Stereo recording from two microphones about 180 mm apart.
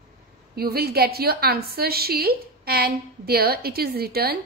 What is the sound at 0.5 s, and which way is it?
A woman's voice, 60° right (ahead or behind).